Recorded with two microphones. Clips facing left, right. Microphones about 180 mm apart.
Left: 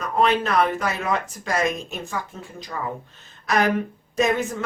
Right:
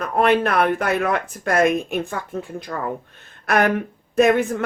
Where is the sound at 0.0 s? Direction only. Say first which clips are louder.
Right 3 dB; 60° right (ahead or behind).